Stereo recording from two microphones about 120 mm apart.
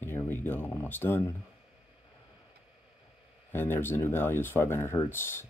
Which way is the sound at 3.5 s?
20° left (ahead or behind).